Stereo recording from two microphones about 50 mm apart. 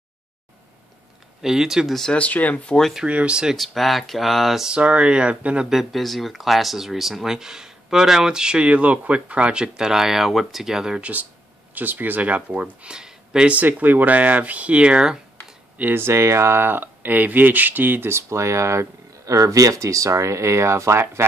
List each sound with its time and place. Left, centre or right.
1.4 s speech: centre
2.1 s speech: left
2.6 s speech: centre
3.1 s speech: right
3.5 s speech: centre
4.6 s speech: right
5.7 s speech: centre
11.0 s speech: right
12.8 s a sound: centre
13.5 s speech: right
15.9 s speech: right
18.1 s speech: right